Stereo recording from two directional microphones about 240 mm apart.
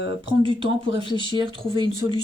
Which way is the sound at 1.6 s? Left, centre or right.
Centre.